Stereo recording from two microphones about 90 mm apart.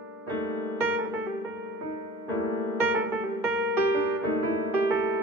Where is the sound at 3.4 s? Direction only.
20° right (ahead or behind).